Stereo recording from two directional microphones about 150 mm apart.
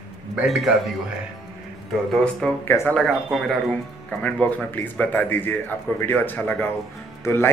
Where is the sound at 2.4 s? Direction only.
5° left (ahead or behind).